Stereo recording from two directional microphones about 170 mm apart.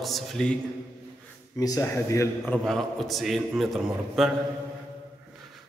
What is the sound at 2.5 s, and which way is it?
Speech, centre (ahead or behind).